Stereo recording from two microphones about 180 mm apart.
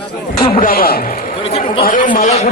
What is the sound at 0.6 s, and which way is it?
Speech, 55° left (ahead or behind).